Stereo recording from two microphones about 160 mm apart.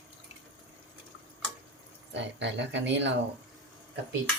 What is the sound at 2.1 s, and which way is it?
Speech, 90° right.